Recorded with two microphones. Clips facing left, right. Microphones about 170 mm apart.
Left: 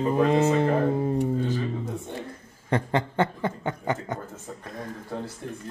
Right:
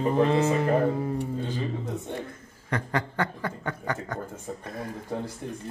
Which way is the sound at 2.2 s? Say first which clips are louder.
Even; 25° left (ahead or behind).